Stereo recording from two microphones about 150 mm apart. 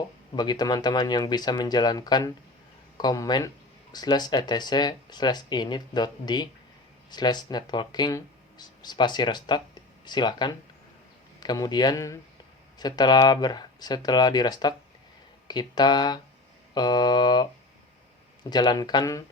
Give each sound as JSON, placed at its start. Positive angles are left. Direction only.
{"t": 0.3, "sound": "speech", "side_deg": 30}
{"t": 18.5, "sound": "speech", "side_deg": 30}